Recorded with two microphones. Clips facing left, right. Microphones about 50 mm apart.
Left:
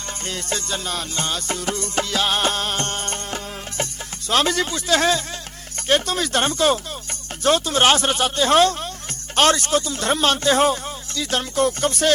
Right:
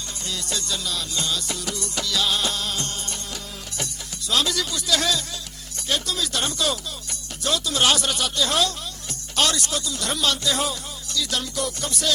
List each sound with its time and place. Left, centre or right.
0.3 s music: left
4.3 s speech: left